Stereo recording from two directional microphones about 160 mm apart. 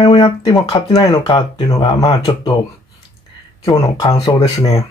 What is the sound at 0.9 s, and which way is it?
Speech, 20° left (ahead or behind).